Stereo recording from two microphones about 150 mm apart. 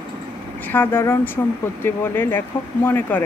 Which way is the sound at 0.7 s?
15° left (ahead or behind).